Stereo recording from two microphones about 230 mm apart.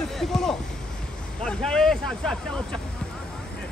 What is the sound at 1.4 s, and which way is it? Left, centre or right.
Speech, centre.